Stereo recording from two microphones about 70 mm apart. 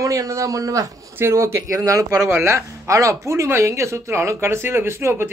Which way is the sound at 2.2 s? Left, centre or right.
Right.